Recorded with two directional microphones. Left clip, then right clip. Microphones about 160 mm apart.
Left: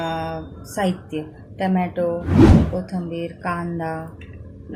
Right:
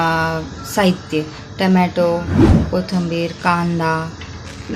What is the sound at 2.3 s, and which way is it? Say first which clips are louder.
Speech: even; centre (ahead or behind).